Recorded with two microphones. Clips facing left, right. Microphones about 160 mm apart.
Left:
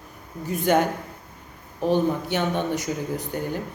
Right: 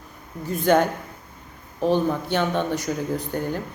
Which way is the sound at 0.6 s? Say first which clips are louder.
Right 2 dB; 15° left (ahead or behind).